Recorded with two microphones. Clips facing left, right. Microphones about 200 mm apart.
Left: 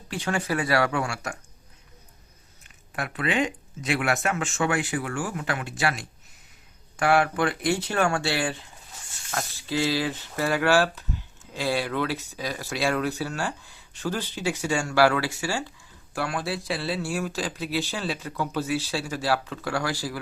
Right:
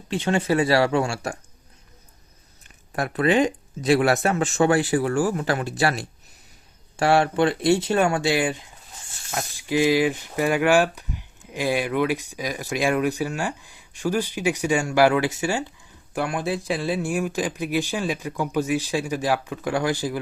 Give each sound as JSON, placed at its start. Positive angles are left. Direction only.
{"t": 0.1, "sound": "speech", "side_deg": -25}
{"t": 2.9, "sound": "speech", "side_deg": -40}